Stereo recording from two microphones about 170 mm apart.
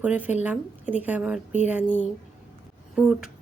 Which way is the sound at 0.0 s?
10° right (ahead or behind).